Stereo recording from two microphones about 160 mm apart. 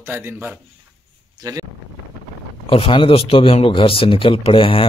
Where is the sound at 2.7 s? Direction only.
30° left (ahead or behind).